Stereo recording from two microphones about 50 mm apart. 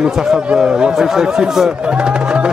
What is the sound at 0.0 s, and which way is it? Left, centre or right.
Speech, centre.